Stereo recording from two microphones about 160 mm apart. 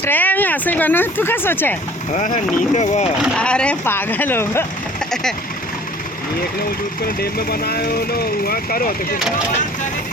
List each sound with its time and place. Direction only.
0.0 s speech: 10° left (ahead or behind)
2.1 s speech: 50° left (ahead or behind)
3.3 s speech: 5° left (ahead or behind)
7.2 s speech: 75° left (ahead or behind)